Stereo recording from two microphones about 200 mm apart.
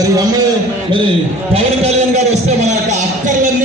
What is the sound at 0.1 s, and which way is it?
Speech, 15° right (ahead or behind).